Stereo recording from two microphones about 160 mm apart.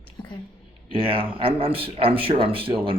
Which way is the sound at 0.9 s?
35° right (ahead or behind).